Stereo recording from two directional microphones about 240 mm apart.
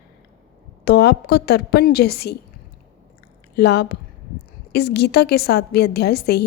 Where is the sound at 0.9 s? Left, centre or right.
Left.